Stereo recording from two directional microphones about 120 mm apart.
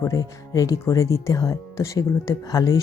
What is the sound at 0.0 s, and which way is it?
A woman's voice, 30° left (ahead or behind).